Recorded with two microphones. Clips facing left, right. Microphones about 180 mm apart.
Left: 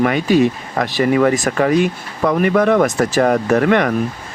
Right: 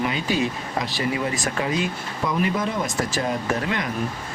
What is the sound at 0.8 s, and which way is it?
Speech, 55° left (ahead or behind).